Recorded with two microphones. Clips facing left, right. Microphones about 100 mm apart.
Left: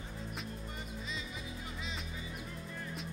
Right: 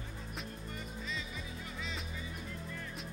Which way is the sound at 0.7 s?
20° left (ahead or behind).